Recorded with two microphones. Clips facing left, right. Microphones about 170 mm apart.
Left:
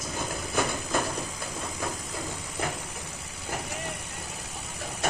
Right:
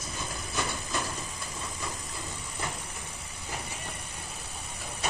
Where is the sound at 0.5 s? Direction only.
50° left (ahead or behind).